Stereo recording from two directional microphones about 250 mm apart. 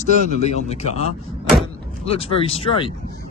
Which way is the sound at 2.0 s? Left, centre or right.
Left.